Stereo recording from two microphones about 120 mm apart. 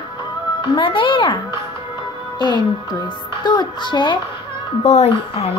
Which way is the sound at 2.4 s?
40° left (ahead or behind).